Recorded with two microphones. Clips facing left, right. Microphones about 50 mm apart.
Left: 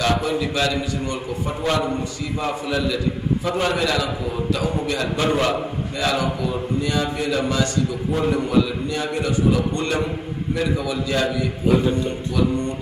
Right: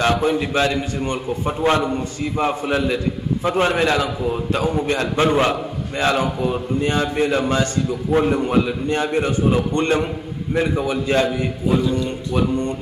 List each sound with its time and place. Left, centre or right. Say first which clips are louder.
0.0 s a man's voice: right 3 dB; right
11.8 s speech: even; left